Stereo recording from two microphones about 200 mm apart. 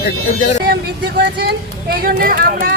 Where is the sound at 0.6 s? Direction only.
55° right (ahead or behind).